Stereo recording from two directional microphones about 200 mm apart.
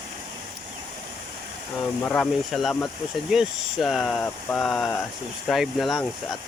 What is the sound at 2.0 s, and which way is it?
Speech, 5° left (ahead or behind).